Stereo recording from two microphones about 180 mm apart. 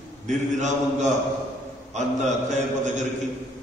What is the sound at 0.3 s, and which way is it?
A man's voice, 40° right (ahead or behind).